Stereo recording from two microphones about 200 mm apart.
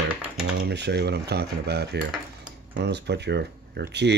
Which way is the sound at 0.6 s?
60° right (ahead or behind).